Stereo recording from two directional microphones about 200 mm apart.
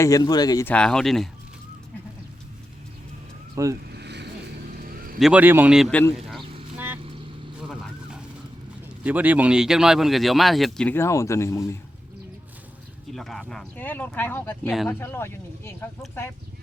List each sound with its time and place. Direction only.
0.0 s speech: 20° left (ahead or behind)
0.7 s speech: 5° left (ahead or behind)
3.5 s speech: 15° right (ahead or behind)
3.8 s vehicle: 55° right (ahead or behind)
4.8 s a sound: 45° right (ahead or behind)
5.2 s speech: 5° right (ahead or behind)
6.7 s vehicle: 10° right (ahead or behind)
9.0 s speech: 10° right (ahead or behind); by 11.8 s 15° left (ahead or behind)
13.1 s speech: centre (ahead or behind)